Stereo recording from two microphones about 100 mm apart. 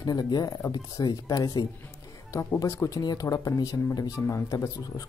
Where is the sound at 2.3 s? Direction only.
30° left (ahead or behind).